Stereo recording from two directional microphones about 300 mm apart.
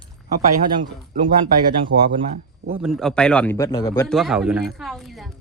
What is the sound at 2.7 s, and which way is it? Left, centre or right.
A woman's voice, centre.